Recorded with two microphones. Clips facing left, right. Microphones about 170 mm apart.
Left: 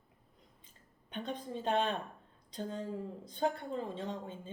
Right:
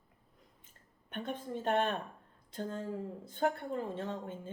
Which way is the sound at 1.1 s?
15° left (ahead or behind).